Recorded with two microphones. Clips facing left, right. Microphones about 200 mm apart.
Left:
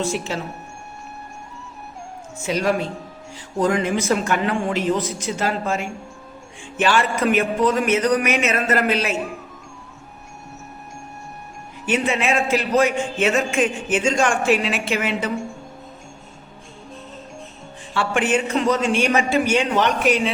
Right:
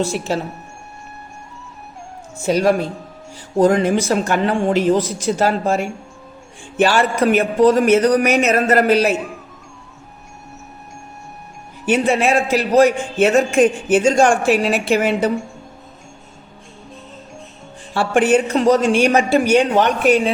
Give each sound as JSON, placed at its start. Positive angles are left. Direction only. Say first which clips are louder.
{"t": 0.3, "sound": "a man's voice", "louder": "right 6 dB", "side_deg": -35}
{"t": 2.5, "sound": "a man's voice", "louder": "right 5 dB", "side_deg": -40}
{"t": 11.9, "sound": "a man's voice", "louder": "right 5 dB", "side_deg": -40}
{"t": 17.9, "sound": "a man's voice", "louder": "right 6 dB", "side_deg": -40}